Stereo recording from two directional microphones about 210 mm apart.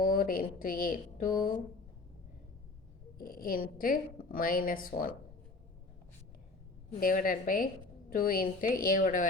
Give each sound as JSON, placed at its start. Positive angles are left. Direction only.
{"t": 0.0, "sound": "speech", "side_deg": 45}
{"t": 3.2, "sound": "a woman's voice", "side_deg": 40}
{"t": 7.0, "sound": "a woman's voice", "side_deg": 40}